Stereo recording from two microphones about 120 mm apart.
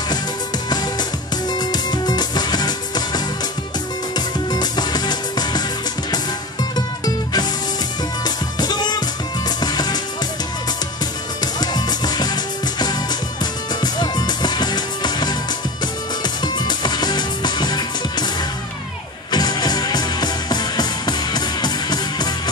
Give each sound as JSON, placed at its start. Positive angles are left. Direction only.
{"t": 1.5, "sound": "music", "side_deg": 35}
{"t": 4.5, "sound": "music", "side_deg": 35}
{"t": 8.2, "sound": "music", "side_deg": 35}
{"t": 11.6, "sound": "music", "side_deg": 35}
{"t": 13.9, "sound": "music", "side_deg": 35}
{"t": 16.5, "sound": "music", "side_deg": 35}
{"t": 19.3, "sound": "music", "side_deg": 35}